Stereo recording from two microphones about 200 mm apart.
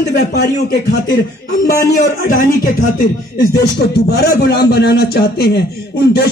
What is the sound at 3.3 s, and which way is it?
A man's voice, 55° left (ahead or behind).